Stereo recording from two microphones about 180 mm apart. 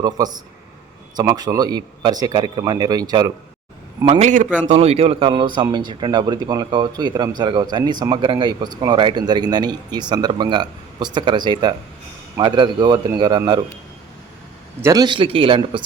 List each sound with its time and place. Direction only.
1.1 s speech: 20° right (ahead or behind)
4.0 s a man's voice: 35° right (ahead or behind)
14.8 s speech: 20° right (ahead or behind)